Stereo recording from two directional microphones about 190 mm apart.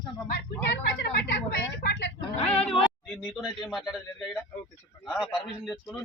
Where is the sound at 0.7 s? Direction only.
65° left (ahead or behind).